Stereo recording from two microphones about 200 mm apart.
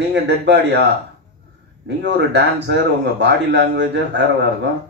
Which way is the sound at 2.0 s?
60° right (ahead or behind).